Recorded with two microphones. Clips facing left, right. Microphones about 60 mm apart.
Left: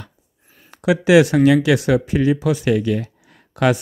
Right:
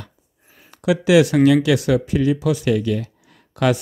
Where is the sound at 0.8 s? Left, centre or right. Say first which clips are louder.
Left 2 dB; left.